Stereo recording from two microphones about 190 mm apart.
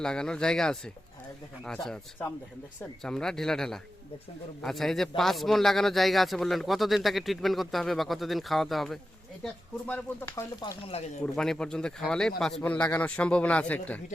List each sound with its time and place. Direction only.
0.0 s a man's voice: 5° left (ahead or behind)